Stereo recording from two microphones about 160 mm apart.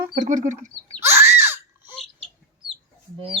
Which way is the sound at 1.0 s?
15° right (ahead or behind).